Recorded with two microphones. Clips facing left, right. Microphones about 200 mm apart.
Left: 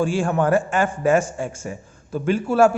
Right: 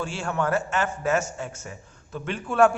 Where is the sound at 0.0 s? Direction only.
15° left (ahead or behind).